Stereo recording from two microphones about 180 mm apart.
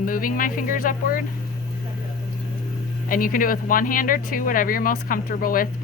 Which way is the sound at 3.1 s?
50° left (ahead or behind).